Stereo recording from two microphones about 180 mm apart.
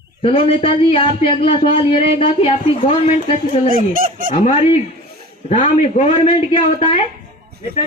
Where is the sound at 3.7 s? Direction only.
50° right (ahead or behind).